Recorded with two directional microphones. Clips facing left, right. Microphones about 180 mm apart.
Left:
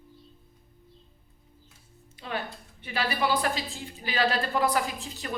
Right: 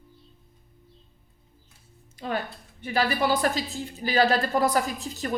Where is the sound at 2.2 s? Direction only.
45° right (ahead or behind).